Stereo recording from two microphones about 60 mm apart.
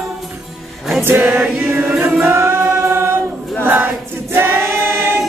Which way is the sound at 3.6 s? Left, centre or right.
Right.